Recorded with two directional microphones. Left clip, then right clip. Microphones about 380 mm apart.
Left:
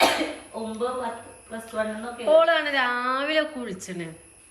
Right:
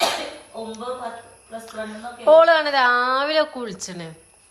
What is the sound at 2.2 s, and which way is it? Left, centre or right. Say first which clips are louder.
A woman's voice: right 6 dB; centre.